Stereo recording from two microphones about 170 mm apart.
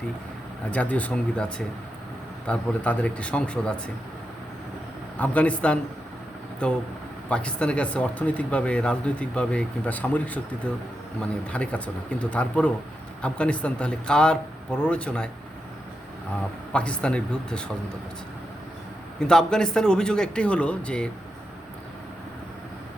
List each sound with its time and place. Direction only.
0.7 s speech: 10° left (ahead or behind)
5.1 s a man's voice: 10° left (ahead or behind)
16.7 s speech: 5° left (ahead or behind)
19.3 s a man's voice: 5° left (ahead or behind)